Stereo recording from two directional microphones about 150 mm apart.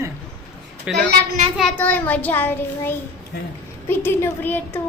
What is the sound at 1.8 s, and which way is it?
A child's voice, 10° left (ahead or behind).